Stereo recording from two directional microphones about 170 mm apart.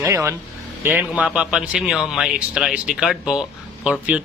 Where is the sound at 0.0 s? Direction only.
15° right (ahead or behind).